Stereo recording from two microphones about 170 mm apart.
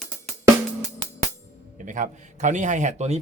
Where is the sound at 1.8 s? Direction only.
50° right (ahead or behind).